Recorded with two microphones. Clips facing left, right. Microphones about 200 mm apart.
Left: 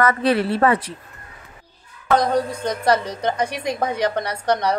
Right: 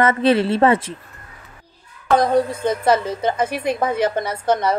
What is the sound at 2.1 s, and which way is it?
A woman's voice, 5° right (ahead or behind).